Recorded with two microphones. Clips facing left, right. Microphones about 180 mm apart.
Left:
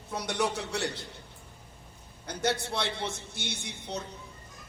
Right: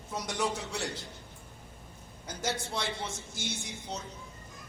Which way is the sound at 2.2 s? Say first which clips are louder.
Left 5 dB; 65° left (ahead or behind).